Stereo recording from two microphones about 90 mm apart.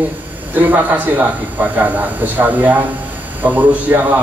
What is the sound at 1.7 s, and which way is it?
A man's voice, 20° right (ahead or behind).